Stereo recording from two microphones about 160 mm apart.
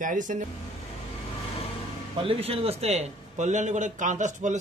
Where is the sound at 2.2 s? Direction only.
35° right (ahead or behind).